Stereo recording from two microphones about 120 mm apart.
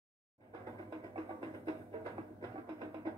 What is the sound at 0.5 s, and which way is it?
Music, 35° right (ahead or behind).